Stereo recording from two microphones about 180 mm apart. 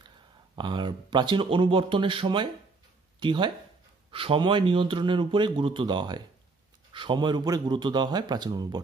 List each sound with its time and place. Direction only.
0.6 s speech: 25° right (ahead or behind)